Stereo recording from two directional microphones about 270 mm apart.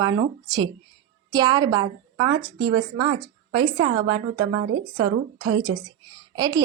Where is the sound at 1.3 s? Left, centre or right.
Centre.